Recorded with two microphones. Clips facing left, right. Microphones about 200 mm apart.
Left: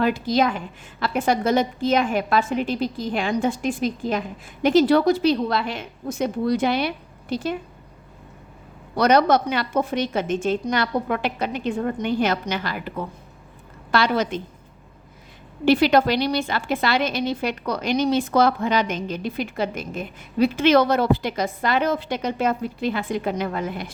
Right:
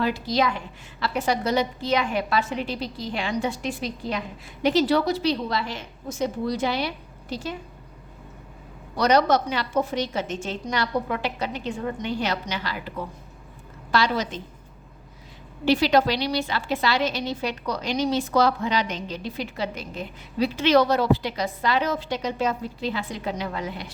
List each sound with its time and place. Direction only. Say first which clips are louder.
0.0 s a woman's voice: left 3 dB; 50° left (ahead or behind)
9.0 s a woman's voice: left 3 dB; 55° left (ahead or behind)
13.9 s a woman's voice: left 3 dB; 55° left (ahead or behind)
15.6 s a woman's voice: left 3 dB; 55° left (ahead or behind)